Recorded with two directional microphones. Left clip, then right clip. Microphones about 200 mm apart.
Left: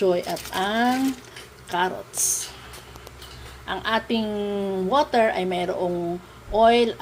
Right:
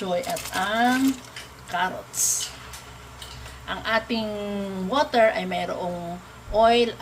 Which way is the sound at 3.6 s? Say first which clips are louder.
Even; 25° left (ahead or behind).